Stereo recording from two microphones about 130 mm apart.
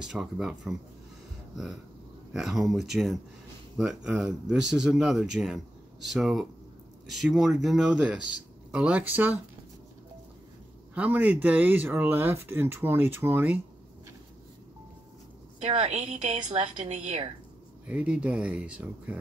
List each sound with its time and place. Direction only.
0.0 s speech: 5° right (ahead or behind)
2.3 s speech: centre (ahead or behind)
11.0 s speech: 10° right (ahead or behind)
15.6 s a woman's voice: 55° right (ahead or behind)
17.8 s speech: 10° right (ahead or behind)